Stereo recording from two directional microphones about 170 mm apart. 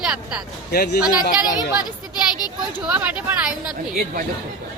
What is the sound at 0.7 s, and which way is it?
Speech, 65° left (ahead or behind).